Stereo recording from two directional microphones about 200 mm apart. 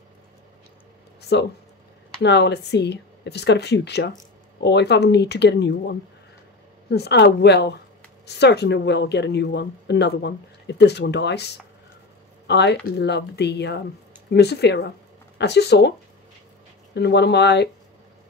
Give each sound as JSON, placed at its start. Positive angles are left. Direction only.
{"t": 1.3, "sound": "speech", "side_deg": 60}
{"t": 16.9, "sound": "speech", "side_deg": 60}